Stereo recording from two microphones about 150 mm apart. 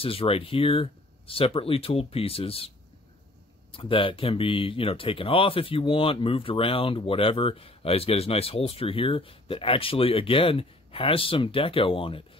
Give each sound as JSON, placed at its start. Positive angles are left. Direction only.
{"t": 0.0, "sound": "speech", "side_deg": 40}
{"t": 3.7, "sound": "speech", "side_deg": 35}